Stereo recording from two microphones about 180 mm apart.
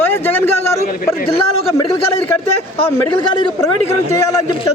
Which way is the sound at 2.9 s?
20° left (ahead or behind).